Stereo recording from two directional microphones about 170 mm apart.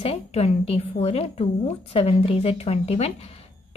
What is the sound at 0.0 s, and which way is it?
A woman's voice, 35° left (ahead or behind).